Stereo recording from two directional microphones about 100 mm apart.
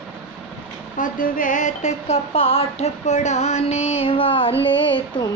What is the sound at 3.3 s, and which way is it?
Music, 90° left.